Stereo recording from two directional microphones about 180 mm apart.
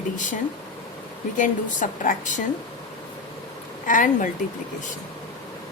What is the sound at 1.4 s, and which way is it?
A woman's voice, 45° left (ahead or behind).